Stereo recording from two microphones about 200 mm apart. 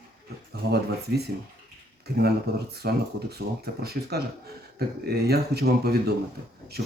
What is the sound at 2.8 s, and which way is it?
Speech, 50° right (ahead or behind).